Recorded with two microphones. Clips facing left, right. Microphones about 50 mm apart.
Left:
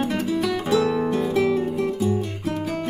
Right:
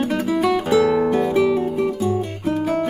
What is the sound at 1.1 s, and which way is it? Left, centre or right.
Guitar, centre.